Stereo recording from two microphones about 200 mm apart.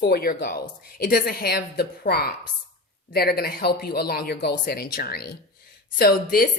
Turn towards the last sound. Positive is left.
turn(degrees=50)  # may be behind; listen again after turning